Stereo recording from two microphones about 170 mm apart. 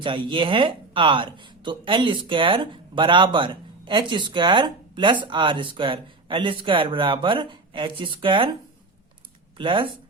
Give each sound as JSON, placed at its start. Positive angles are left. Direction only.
{"t": 0.0, "sound": "speech", "side_deg": -30}
{"t": 9.6, "sound": "speech", "side_deg": -30}